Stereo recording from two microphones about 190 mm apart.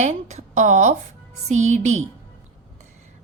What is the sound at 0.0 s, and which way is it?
A woman's voice, 35° right (ahead or behind).